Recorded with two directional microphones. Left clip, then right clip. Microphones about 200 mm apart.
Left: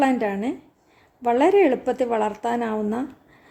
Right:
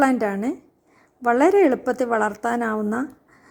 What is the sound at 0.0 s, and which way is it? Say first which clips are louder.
A woman's voice: right 1 dB; 20° right (ahead or behind).